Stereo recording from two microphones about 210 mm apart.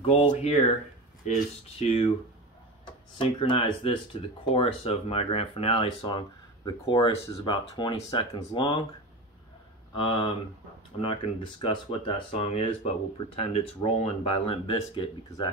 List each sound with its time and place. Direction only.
0.0 s speech: 25° left (ahead or behind)
1.8 s speech: 30° left (ahead or behind)
3.2 s speech: 25° left (ahead or behind)
9.9 s speech: 25° left (ahead or behind)